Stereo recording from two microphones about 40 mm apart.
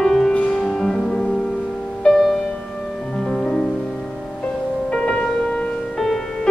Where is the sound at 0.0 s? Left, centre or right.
Centre; by 2.2 s left.